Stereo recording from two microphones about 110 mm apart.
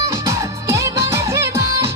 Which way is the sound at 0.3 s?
30° right (ahead or behind).